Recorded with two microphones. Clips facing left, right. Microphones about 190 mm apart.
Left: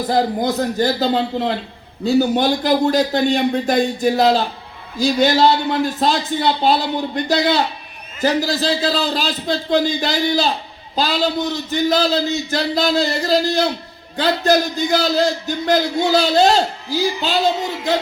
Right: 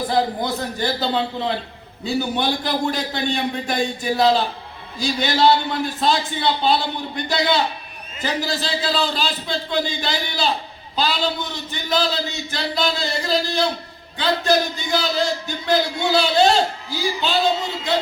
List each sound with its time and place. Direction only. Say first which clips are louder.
0.1 s a man's voice: left 5 dB; 45° left (ahead or behind)